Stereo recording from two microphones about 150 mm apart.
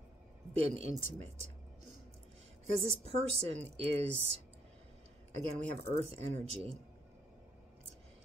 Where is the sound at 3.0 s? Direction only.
40° right (ahead or behind).